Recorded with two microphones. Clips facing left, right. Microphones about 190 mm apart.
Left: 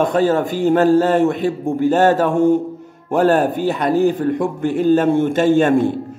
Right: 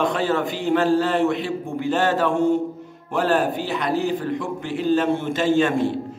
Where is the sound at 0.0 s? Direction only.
45° left (ahead or behind).